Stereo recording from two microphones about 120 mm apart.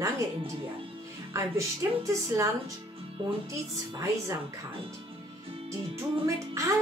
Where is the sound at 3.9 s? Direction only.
30° right (ahead or behind).